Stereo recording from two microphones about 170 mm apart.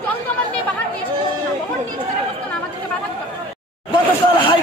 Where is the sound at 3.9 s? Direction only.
30° left (ahead or behind).